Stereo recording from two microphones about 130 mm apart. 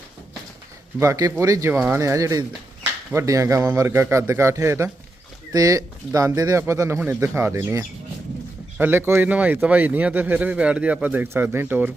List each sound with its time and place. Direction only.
0.9 s a man's voice: 25° right (ahead or behind)